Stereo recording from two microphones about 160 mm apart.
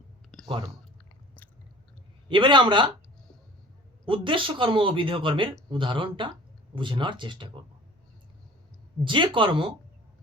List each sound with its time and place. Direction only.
0.4 s speech: 25° right (ahead or behind)
2.3 s speech: 30° right (ahead or behind)
4.0 s speech: 30° right (ahead or behind)
9.0 s speech: 30° right (ahead or behind)